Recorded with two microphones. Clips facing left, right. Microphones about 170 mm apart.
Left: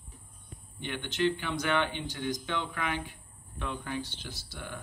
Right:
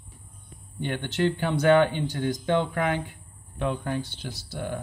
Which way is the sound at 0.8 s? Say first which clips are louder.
Right 4 dB; 45° right (ahead or behind).